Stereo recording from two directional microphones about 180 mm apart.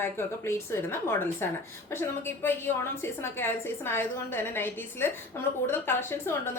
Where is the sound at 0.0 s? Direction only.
15° left (ahead or behind).